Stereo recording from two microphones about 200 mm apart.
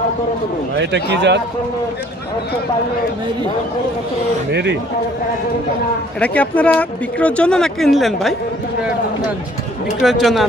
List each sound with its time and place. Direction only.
0.7 s speech: 60° right (ahead or behind)
4.5 s speech: 60° right (ahead or behind)
6.1 s speech: 5° left (ahead or behind)
10.0 s speech: centre (ahead or behind)